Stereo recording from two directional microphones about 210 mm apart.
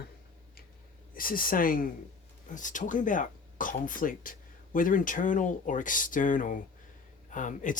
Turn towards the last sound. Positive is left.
turn(degrees=35)  # may be behind; listen again after turning